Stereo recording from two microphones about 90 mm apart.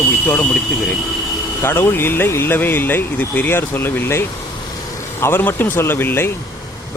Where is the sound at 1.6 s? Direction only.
30° left (ahead or behind).